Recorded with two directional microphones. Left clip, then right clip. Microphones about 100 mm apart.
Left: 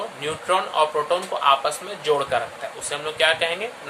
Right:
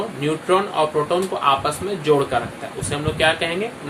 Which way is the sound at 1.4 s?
40° left (ahead or behind).